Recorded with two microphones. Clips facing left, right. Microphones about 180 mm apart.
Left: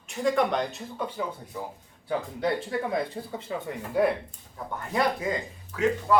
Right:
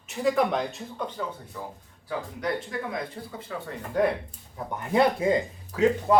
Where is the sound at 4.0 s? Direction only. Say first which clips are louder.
Even; 10° left (ahead or behind).